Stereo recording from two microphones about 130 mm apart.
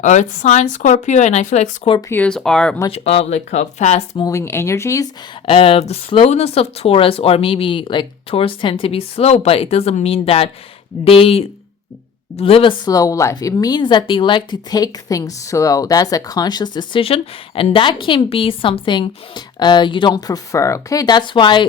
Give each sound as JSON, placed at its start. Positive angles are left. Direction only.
{"t": 0.0, "sound": "speech", "side_deg": 70}
{"t": 2.0, "sound": "speech", "side_deg": 20}
{"t": 2.2, "sound": "speech", "side_deg": 5}
{"t": 2.9, "sound": "speech", "side_deg": 50}
{"t": 4.2, "sound": "speech", "side_deg": 25}
{"t": 5.5, "sound": "speech", "side_deg": 45}
{"t": 12.8, "sound": "speech", "side_deg": 25}